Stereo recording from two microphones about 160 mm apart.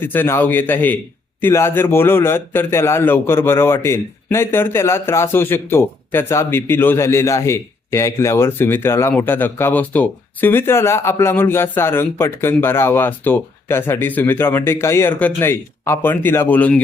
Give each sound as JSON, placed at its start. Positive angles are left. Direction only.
{"t": 0.0, "sound": "a man's voice", "side_deg": 15}